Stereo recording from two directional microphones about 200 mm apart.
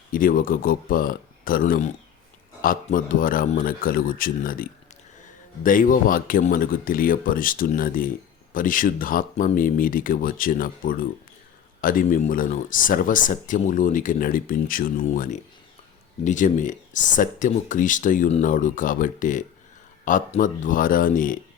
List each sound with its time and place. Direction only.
0.1 s speech: 45° left (ahead or behind)